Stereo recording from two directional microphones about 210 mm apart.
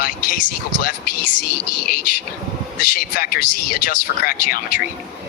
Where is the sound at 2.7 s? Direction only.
45° left (ahead or behind).